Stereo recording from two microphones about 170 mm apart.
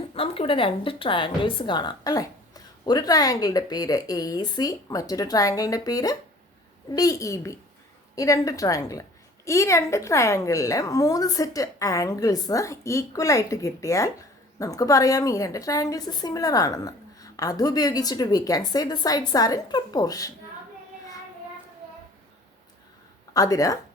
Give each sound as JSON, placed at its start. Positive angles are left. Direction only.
{"t": 0.1, "sound": "a woman's voice", "side_deg": 35}
{"t": 23.3, "sound": "a woman's voice", "side_deg": 20}